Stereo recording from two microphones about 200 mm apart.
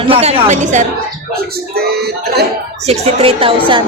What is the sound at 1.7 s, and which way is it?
Speech, 50° right (ahead or behind).